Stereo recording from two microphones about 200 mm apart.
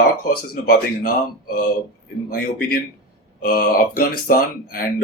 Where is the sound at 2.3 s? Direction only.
50° left (ahead or behind).